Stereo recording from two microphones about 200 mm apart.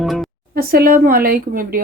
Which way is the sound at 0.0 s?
Centre (ahead or behind).